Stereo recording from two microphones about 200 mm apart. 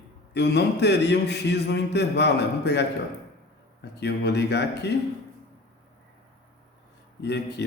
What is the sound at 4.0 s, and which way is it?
Speech, 55° left (ahead or behind).